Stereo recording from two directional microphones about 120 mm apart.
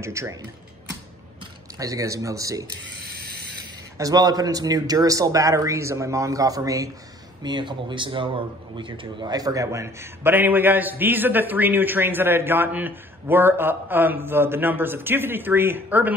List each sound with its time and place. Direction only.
0.0 s a man's voice: 25° right (ahead or behind)
1.8 s a man's voice: 30° right (ahead or behind)
4.0 s a man's voice: 35° right (ahead or behind)
7.4 s a man's voice: 40° right (ahead or behind); by 16.1 s 15° right (ahead or behind)